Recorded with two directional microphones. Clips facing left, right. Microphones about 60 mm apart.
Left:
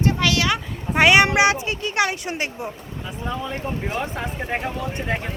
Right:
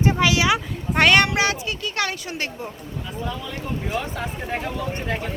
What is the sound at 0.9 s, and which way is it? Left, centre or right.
Speech, centre.